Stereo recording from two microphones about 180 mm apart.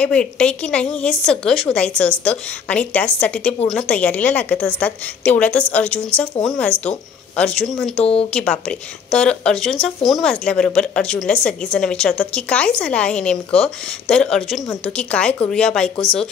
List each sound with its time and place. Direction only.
0.0 s a woman's voice: 5° left (ahead or behind)
8.0 s speech: 35° left (ahead or behind)
8.3 s speech: 5° left (ahead or behind)